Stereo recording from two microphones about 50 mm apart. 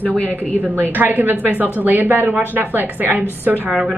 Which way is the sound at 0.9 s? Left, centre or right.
Right.